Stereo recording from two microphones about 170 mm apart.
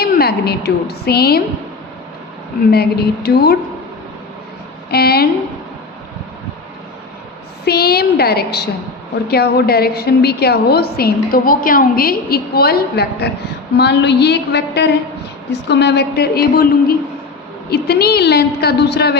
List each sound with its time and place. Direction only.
0.0 s a woman's voice: 65° left (ahead or behind)
2.6 s a woman's voice: 65° left (ahead or behind)
4.9 s a woman's voice: 70° left (ahead or behind)
7.6 s a woman's voice: 70° left (ahead or behind)
13.7 s a woman's voice: 85° left; by 16.6 s 65° left (ahead or behind)
17.7 s a woman's voice: 70° left (ahead or behind)